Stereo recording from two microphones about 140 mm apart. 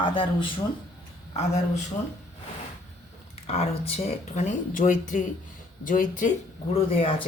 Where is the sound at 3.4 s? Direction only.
45° left (ahead or behind); by 6.3 s 70° left (ahead or behind).